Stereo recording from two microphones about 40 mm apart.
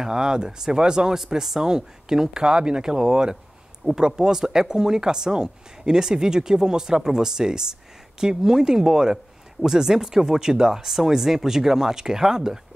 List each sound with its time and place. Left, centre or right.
0.0 s speech: centre
1.2 s speech: centre